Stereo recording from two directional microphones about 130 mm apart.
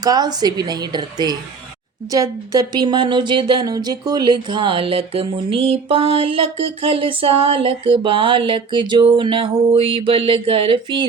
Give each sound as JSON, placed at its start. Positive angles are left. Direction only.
{"t": 0.0, "sound": "a woman's voice", "side_deg": -30}